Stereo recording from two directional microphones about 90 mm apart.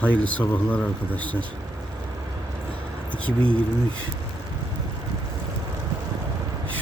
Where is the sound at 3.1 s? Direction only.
15° left (ahead or behind).